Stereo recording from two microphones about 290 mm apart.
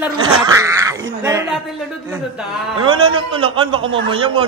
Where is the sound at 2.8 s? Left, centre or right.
Centre.